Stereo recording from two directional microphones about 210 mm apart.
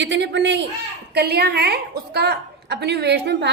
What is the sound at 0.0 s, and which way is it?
A man's voice, 55° right (ahead or behind).